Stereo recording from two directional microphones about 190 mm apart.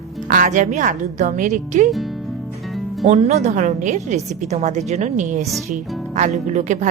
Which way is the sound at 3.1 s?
35° right (ahead or behind).